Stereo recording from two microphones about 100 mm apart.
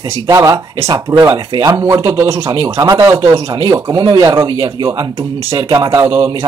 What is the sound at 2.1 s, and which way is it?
Speech, 30° right (ahead or behind).